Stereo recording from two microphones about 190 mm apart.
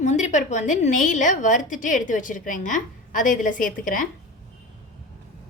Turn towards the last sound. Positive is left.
turn(degrees=45)  # may be behind; listen again after turning